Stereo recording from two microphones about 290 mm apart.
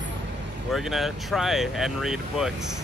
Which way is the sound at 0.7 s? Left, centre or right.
Centre.